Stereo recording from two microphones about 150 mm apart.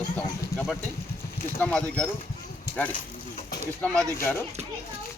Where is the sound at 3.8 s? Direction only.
10° left (ahead or behind).